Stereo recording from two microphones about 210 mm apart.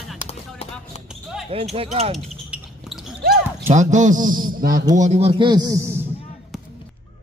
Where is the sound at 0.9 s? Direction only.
30° left (ahead or behind).